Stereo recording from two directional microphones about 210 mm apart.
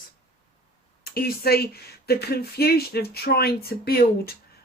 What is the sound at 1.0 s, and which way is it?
Speech, 45° left (ahead or behind).